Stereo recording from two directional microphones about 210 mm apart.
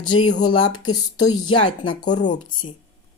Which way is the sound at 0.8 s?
20° left (ahead or behind).